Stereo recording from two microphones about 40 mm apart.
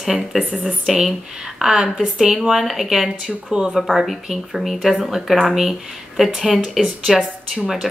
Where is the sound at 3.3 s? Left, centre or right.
Right.